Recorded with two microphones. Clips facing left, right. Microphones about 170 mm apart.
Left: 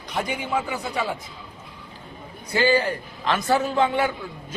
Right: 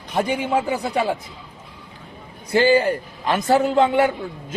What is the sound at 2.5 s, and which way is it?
Speech, 50° right (ahead or behind).